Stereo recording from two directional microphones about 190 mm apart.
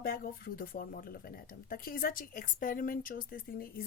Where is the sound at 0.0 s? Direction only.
50° left (ahead or behind).